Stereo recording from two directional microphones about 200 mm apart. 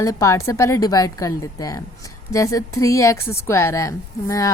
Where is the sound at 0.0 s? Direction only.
15° left (ahead or behind).